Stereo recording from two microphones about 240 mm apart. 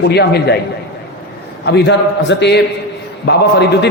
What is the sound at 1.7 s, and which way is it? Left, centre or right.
A man's voice, left.